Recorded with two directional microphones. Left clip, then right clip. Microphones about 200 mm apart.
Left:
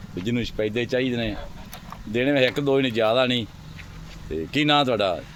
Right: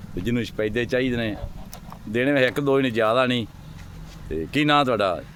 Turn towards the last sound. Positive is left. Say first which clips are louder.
# right 1 dB
turn(degrees=0)  # may be behind; listen again after turning